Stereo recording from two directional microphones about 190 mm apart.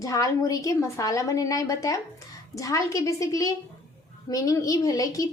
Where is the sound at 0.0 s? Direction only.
15° left (ahead or behind).